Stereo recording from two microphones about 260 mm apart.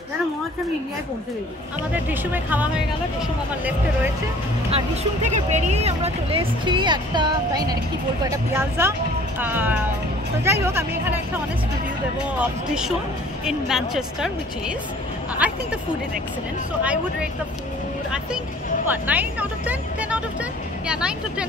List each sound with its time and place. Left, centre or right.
2.0 s speech: centre
4.6 s speech: right; by 11.1 s centre
12.4 s speech: centre
15.4 s speech: centre
16.8 s speech: centre
18.9 s speech: centre